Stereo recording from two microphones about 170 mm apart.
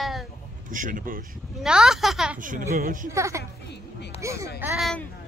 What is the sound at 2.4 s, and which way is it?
Speech, 50° right (ahead or behind).